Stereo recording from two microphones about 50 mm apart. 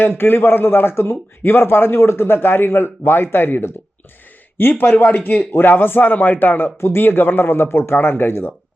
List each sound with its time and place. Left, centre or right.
0.0 s a man's voice: left
6.7 s a man's voice: left
7.0 s a man's voice: left